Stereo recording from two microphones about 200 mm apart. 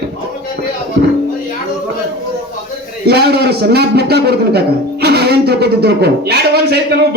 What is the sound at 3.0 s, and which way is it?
A man's voice, 55° right (ahead or behind).